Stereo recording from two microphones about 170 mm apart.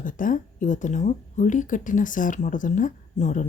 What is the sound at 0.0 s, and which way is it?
Speech, 50° left (ahead or behind).